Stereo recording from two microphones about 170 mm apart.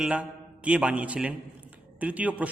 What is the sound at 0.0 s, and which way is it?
A man's voice, 5° right (ahead or behind).